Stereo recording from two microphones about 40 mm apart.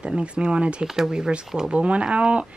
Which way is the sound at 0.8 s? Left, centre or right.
Centre.